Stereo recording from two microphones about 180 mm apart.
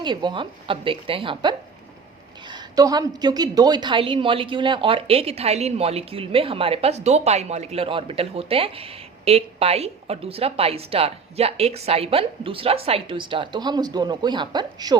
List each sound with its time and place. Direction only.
0.0 s a woman's voice: 25° right (ahead or behind)